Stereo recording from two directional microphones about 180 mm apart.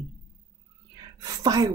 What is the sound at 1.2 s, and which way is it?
Speech, 20° right (ahead or behind).